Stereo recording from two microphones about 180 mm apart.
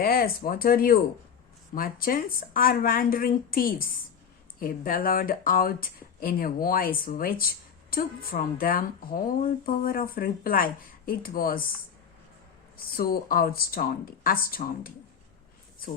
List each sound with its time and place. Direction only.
0.0 s speech: 55° left (ahead or behind)
12.7 s speech: 55° left (ahead or behind)